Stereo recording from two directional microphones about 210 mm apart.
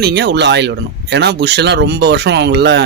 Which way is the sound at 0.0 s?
50° right (ahead or behind).